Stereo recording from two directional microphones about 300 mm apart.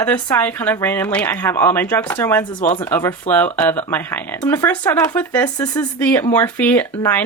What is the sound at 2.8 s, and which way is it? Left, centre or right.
Speech, centre.